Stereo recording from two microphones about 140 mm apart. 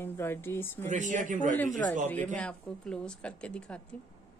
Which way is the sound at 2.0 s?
10° left (ahead or behind).